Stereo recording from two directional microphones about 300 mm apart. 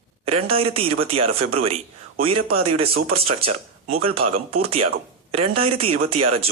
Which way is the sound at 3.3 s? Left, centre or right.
Centre.